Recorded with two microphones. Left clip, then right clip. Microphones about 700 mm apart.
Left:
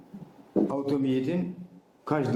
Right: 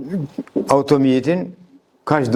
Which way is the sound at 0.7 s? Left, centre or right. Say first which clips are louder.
Right 13 dB; right.